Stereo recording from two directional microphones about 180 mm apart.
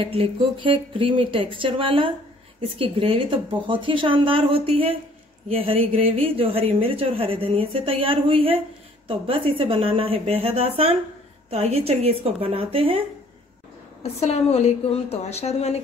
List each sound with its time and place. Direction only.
0.0 s a woman's voice: 30° right (ahead or behind)
14.2 s a woman's voice: 35° left (ahead or behind)